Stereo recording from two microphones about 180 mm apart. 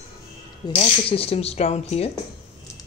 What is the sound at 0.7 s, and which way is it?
Speech, 30° left (ahead or behind).